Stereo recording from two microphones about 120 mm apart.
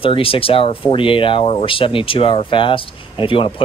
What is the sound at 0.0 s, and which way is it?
Speech, 50° left (ahead or behind).